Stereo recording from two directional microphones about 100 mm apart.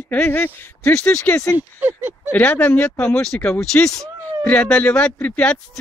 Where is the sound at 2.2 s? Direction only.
15° left (ahead or behind).